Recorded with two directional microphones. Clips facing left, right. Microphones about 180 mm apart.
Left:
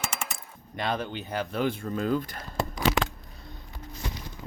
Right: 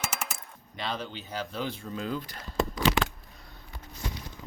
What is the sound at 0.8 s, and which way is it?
Speech, 55° left (ahead or behind).